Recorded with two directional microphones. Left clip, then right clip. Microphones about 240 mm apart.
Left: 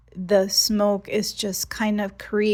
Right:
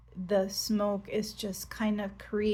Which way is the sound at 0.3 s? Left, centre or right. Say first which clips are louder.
Left 10 dB; left.